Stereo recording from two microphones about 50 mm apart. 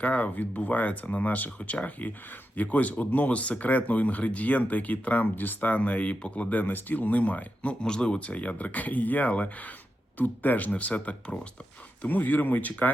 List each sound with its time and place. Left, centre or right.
0.0 s speech: left